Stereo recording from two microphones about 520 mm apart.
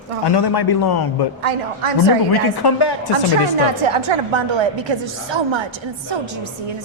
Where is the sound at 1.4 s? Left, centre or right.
Right.